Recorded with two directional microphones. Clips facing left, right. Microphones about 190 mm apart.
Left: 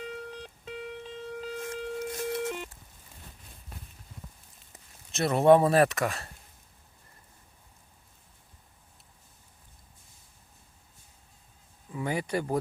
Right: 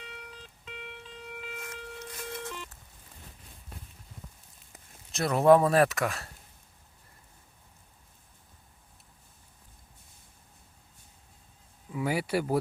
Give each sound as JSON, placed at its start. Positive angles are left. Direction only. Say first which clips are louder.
{"t": 0.0, "sound": "music", "louder": "left 9 dB", "side_deg": 40}
{"t": 0.3, "sound": "music", "louder": "left 7 dB", "side_deg": 60}
{"t": 0.7, "sound": "music", "louder": "left 6 dB", "side_deg": 40}
{"t": 4.7, "sound": "speech", "louder": "left 1 dB", "side_deg": 0}
{"t": 11.9, "sound": "a sound", "louder": "right 1 dB", "side_deg": -5}